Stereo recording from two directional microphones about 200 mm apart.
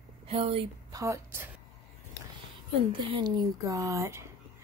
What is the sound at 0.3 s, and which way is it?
Speech, 30° right (ahead or behind).